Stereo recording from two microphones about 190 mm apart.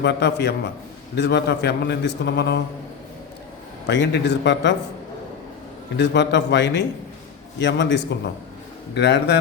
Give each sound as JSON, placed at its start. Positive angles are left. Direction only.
{"t": 0.0, "sound": "a man's voice", "side_deg": 65}
{"t": 3.8, "sound": "a man's voice", "side_deg": 65}
{"t": 6.0, "sound": "a man's voice", "side_deg": 70}